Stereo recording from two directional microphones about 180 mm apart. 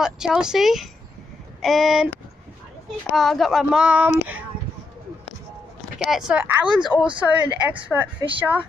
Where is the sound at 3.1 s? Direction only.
Centre (ahead or behind).